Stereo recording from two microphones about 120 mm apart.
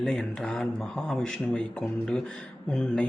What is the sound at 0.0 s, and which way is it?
Speech, 5° left (ahead or behind).